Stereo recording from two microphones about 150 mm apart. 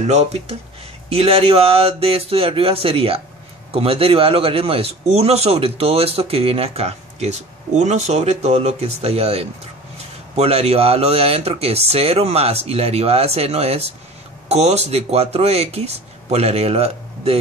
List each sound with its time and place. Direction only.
0.0 s a man's voice: 45° right (ahead or behind)